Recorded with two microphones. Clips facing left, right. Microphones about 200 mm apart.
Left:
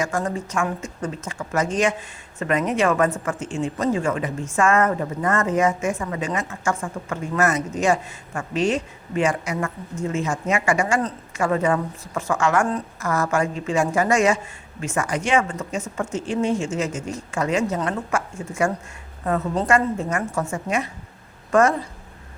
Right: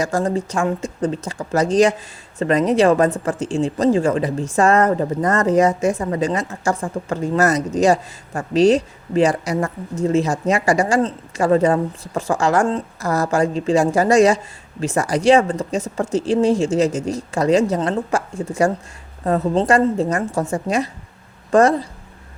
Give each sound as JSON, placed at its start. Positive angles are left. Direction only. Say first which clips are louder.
{"t": 0.0, "sound": "a woman's voice", "louder": "right 5 dB", "side_deg": -35}